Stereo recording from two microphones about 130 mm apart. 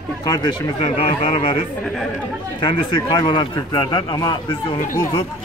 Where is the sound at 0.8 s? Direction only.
50° left (ahead or behind).